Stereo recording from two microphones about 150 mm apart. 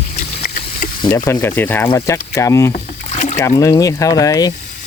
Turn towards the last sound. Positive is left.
turn(degrees=25)  # may be behind; listen again after turning